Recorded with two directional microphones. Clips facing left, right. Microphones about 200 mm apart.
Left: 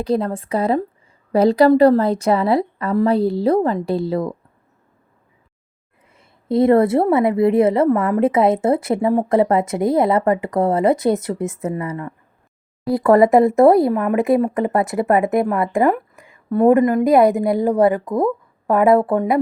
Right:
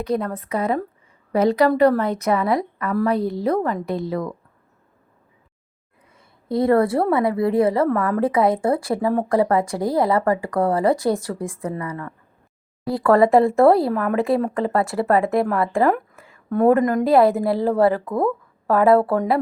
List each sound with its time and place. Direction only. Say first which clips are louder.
0.0 s a woman's voice: left 3 dB; 30° left (ahead or behind)
6.1 s a woman's voice: left 5 dB; 25° left (ahead or behind)